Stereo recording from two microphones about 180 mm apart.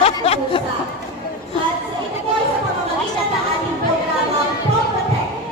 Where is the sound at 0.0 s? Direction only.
35° left (ahead or behind).